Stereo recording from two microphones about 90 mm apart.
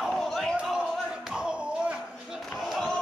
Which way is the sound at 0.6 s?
10° right (ahead or behind).